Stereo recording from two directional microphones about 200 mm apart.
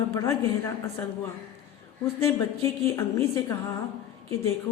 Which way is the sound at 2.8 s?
15° left (ahead or behind).